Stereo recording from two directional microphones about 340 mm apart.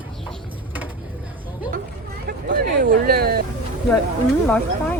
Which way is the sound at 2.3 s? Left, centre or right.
Right.